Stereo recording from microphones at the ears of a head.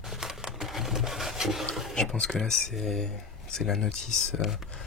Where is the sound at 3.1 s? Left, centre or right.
Left.